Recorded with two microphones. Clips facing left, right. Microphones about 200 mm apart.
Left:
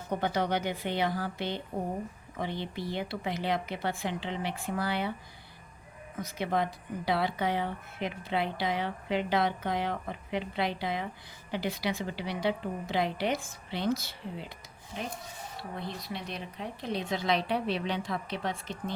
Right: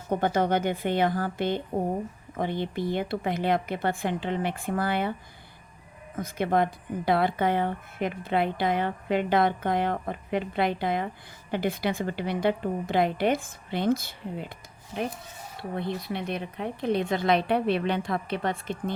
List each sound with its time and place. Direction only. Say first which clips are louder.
0.1 s a woman's voice: right 5 dB; 50° right (ahead or behind)
6.1 s a woman's voice: right 6 dB; 50° right (ahead or behind)
15.7 s a woman's voice: right 8 dB; 55° right (ahead or behind)